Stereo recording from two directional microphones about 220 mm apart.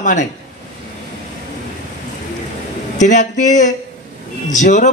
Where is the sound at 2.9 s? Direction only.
35° left (ahead or behind).